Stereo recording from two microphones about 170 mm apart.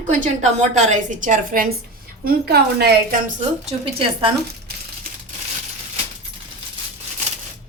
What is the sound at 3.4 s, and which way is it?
Speech, 30° right (ahead or behind).